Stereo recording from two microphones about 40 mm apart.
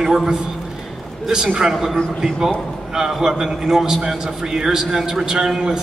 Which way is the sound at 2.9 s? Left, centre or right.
Centre.